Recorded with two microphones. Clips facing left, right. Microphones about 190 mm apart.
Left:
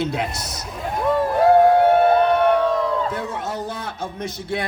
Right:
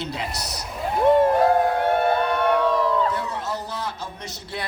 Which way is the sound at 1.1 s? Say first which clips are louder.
Right 4 dB; 20° right (ahead or behind).